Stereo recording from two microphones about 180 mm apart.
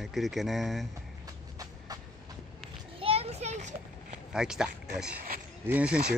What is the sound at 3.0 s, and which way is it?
Children playing, 35° right (ahead or behind).